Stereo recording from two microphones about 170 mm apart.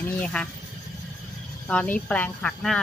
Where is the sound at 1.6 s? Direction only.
10° left (ahead or behind).